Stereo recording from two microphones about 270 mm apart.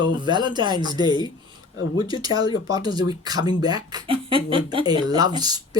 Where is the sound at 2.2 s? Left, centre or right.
Centre.